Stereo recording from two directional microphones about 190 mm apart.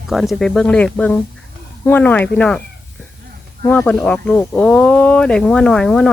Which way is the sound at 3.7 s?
10° left (ahead or behind).